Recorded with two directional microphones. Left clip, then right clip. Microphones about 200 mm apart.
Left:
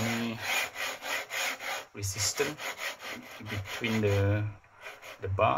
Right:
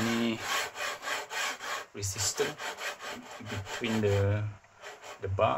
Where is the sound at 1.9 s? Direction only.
Centre (ahead or behind).